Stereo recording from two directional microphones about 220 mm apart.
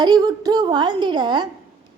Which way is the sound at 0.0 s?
20° right (ahead or behind).